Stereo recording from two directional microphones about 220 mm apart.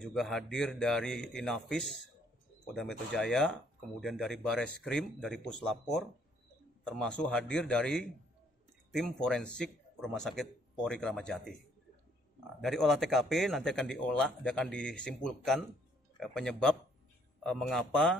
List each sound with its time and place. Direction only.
0.0 s speech: centre (ahead or behind)
12.5 s speech: centre (ahead or behind)